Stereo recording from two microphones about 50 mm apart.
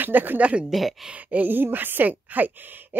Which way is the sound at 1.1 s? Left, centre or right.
Right.